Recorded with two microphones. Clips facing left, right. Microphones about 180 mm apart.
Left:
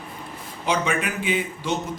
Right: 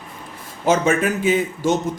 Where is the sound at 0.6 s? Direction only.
45° right (ahead or behind).